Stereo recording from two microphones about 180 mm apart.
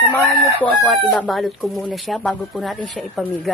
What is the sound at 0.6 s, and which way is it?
A woman's voice, 5° left (ahead or behind).